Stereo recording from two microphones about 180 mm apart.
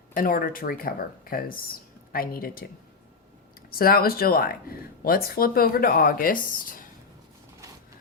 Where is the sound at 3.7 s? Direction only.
55° left (ahead or behind).